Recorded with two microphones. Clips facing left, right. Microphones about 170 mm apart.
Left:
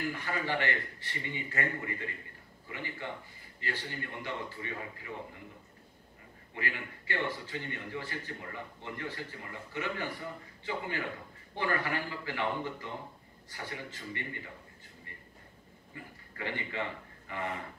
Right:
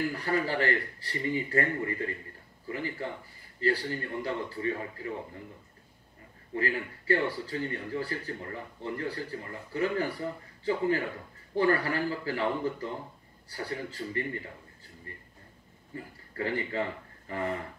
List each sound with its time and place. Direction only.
0.1 s a man's voice: 35° right (ahead or behind)
6.5 s a man's voice: 35° right (ahead or behind)
15.9 s a man's voice: 35° right (ahead or behind)